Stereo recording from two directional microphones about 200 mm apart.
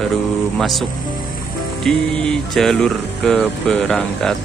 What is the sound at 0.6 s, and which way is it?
Music, centre (ahead or behind).